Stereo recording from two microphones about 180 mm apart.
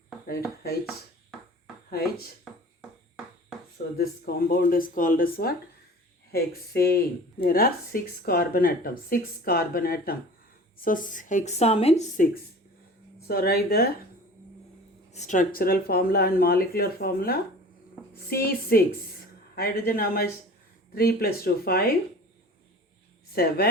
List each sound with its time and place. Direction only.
1.9 s speech: 60° left (ahead or behind)
3.9 s speech: 55° left (ahead or behind)
13.2 s speech: 60° left (ahead or behind)
15.1 s speech: 40° left (ahead or behind); by 21.9 s 55° left (ahead or behind)
23.3 s speech: 55° left (ahead or behind)